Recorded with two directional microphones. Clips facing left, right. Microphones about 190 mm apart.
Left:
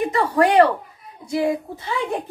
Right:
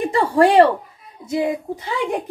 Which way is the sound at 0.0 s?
30° right (ahead or behind).